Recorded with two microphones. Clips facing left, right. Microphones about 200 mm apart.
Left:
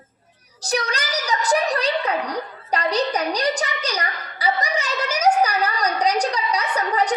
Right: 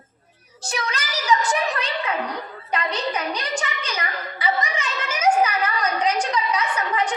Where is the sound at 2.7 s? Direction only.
35° left (ahead or behind).